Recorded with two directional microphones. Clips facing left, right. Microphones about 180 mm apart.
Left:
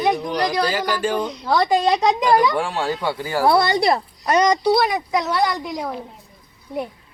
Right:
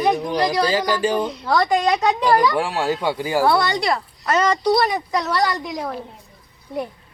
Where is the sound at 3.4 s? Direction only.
20° left (ahead or behind); by 5.9 s 5° left (ahead or behind).